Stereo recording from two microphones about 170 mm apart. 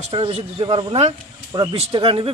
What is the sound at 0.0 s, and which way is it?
Speech, 35° right (ahead or behind).